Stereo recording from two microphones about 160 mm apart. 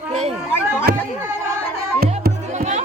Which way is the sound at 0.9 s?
80° right.